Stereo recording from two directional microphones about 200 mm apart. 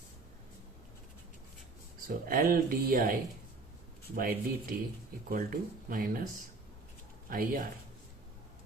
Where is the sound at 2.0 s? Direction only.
45° right (ahead or behind).